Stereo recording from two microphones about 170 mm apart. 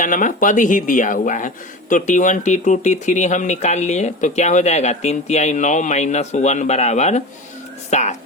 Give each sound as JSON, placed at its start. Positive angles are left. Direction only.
{"t": 0.0, "sound": "speech", "side_deg": 50}